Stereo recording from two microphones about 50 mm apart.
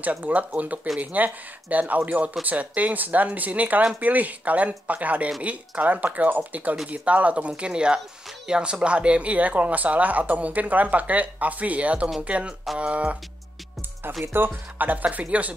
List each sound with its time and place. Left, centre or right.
0.0 s speech: right
14.2 s speech: right
14.5 s speech: right